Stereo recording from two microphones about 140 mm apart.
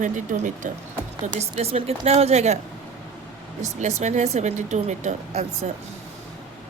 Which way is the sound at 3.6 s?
55° right (ahead or behind).